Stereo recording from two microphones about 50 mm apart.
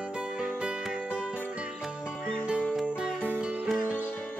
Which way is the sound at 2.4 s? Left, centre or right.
Centre.